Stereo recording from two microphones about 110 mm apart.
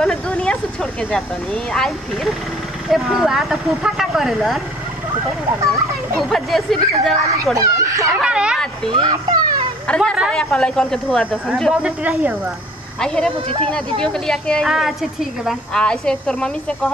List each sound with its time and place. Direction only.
0.0 s a woman's voice: 5° left (ahead or behind)
5.7 s a woman's voice: centre (ahead or behind)
7.5 s speech: 30° right (ahead or behind)
8.2 s speech: 10° right (ahead or behind)
8.9 s speech: 40° right (ahead or behind)
9.8 s a woman's voice: 10° left (ahead or behind)
11.8 s speech: 10° right (ahead or behind)
13.0 s a woman's voice: 5° left (ahead or behind)